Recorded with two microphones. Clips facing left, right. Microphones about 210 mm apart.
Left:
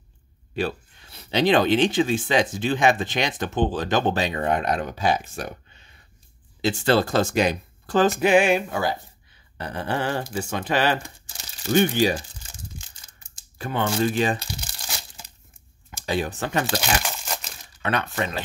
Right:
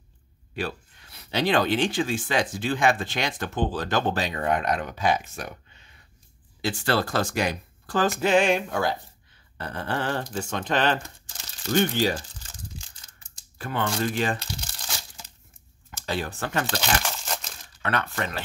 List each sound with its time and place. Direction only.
0.6 s speech: 25° left (ahead or behind)
13.6 s speech: 20° left (ahead or behind)
14.1 s crumpling: 15° left (ahead or behind)
17.8 s speech: 20° left (ahead or behind)